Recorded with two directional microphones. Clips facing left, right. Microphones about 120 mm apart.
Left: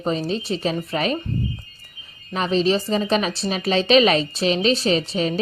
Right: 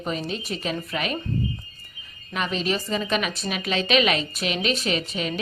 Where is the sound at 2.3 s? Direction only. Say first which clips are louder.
Left 6 dB; 35° left (ahead or behind).